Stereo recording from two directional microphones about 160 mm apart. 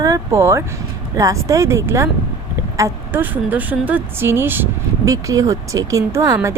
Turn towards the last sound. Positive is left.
turn(degrees=-20)  # may be behind; listen again after turning